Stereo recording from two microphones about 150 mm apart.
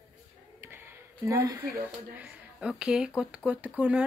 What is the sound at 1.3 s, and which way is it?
Speech, 20° right (ahead or behind).